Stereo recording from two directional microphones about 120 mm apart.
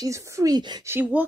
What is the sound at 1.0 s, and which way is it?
Speech, 15° right (ahead or behind).